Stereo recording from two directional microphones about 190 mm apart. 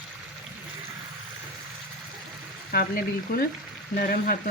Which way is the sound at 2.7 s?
50° left (ahead or behind).